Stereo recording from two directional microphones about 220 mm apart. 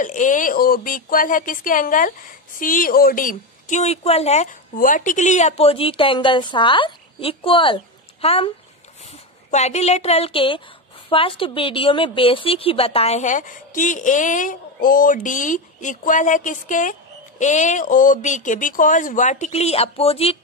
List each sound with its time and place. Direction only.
0.0 s a woman's voice: 35° left (ahead or behind)
9.5 s a woman's voice: 30° left (ahead or behind)